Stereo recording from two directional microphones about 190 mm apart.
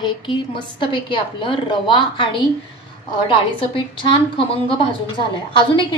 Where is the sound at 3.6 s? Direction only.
25° left (ahead or behind).